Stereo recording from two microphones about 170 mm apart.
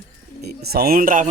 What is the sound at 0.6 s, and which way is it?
Speech, 65° right (ahead or behind).